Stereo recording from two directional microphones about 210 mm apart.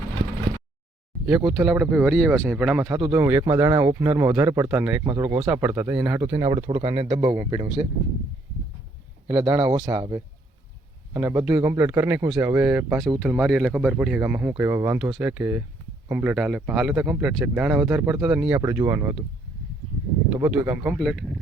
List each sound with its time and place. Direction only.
1.5 s speech: centre (ahead or behind)
6.5 s speech: 30° right (ahead or behind)
9.2 s speech: 20° right (ahead or behind)
20.4 s speech: 5° right (ahead or behind)